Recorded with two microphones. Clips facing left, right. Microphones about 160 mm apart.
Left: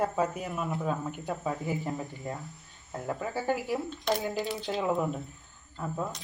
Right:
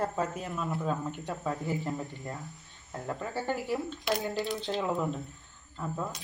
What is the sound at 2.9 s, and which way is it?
Speech, 15° left (ahead or behind).